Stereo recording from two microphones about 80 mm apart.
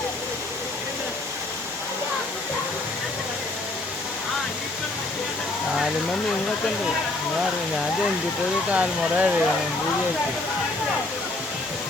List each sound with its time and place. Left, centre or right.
8.7 s speech: centre